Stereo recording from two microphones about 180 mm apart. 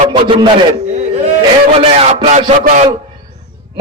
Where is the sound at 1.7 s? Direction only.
35° right (ahead or behind).